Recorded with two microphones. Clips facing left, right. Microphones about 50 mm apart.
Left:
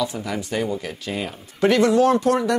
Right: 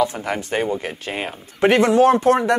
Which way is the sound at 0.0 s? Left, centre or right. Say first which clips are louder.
Right 4 dB; right.